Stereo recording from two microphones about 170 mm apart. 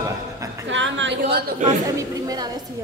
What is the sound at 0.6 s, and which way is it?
Speech, 90° right.